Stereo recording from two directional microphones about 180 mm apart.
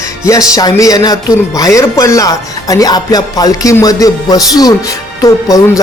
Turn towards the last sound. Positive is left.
turn(degrees=20)  # may be behind; listen again after turning